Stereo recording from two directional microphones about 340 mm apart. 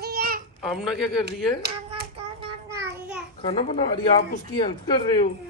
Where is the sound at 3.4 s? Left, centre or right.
Centre.